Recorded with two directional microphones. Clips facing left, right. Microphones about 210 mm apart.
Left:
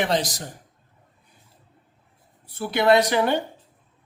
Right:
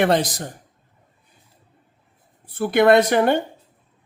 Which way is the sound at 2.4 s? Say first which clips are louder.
Right 6 dB; 50° right (ahead or behind).